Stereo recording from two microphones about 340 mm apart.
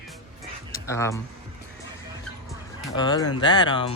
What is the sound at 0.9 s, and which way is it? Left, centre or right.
Speech, centre.